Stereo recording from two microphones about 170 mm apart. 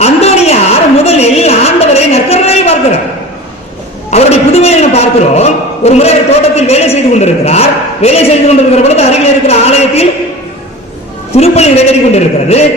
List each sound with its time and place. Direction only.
0.0 s a sound: 40° left (ahead or behind)
4.1 s a man's voice: 40° left (ahead or behind)
11.3 s speech: 40° left (ahead or behind)